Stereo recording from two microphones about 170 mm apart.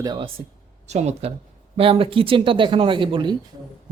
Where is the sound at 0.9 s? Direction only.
40° right (ahead or behind).